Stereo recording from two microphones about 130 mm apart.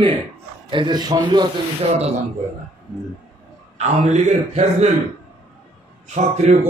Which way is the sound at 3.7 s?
60° right (ahead or behind).